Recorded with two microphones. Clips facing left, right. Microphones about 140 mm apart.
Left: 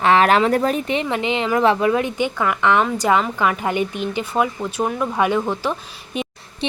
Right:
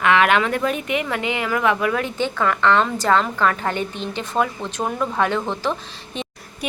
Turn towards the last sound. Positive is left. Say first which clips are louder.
# left 3 dB
turn(degrees=25)  # may be behind; listen again after turning